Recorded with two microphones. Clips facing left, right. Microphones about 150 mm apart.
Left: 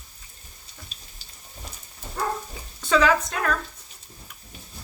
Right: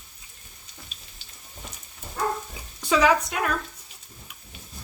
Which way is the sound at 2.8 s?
10° right (ahead or behind).